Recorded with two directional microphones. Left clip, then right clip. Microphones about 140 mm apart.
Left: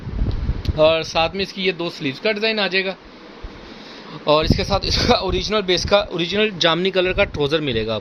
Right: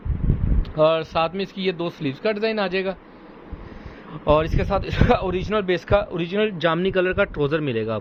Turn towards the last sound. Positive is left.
turn(degrees=15)  # may be behind; listen again after turning